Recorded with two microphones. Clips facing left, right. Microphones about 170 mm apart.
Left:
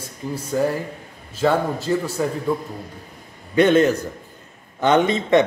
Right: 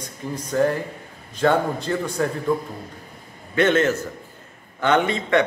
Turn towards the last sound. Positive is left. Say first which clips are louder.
# left 3 dB
turn(degrees=20)  # may be behind; listen again after turning